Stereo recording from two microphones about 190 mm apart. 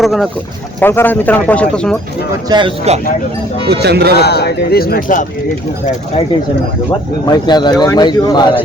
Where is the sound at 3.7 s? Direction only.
60° right (ahead or behind).